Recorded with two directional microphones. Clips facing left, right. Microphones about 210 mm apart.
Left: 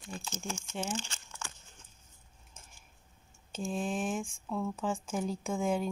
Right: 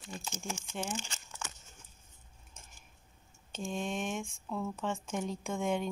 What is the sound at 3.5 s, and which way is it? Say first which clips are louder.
A woman's voice: left 2 dB; centre (ahead or behind).